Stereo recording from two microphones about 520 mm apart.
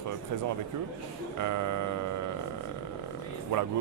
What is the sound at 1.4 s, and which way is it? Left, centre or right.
Speech, right.